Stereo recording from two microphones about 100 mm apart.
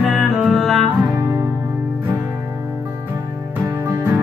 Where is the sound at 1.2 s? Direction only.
30° right (ahead or behind).